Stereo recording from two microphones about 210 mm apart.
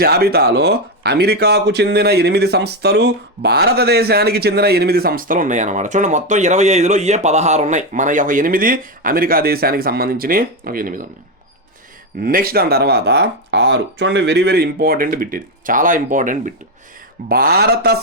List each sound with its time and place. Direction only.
0.0 s speech: 45° right (ahead or behind)
12.2 s speech: 45° right (ahead or behind)